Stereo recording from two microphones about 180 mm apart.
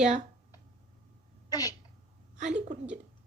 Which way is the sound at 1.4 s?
20° left (ahead or behind).